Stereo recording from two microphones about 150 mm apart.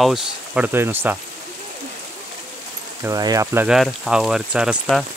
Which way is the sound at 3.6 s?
Centre (ahead or behind).